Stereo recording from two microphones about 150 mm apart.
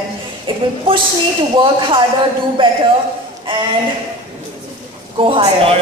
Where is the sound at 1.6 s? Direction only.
35° right (ahead or behind).